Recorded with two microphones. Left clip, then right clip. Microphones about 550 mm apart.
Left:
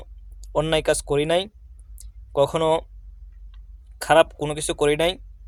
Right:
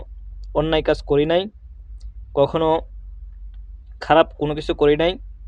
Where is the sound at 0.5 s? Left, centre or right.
Left.